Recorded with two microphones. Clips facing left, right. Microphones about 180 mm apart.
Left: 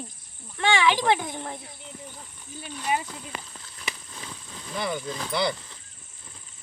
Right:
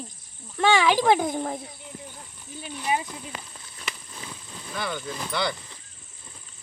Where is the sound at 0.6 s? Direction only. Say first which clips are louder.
Right 2 dB; 40° right (ahead or behind).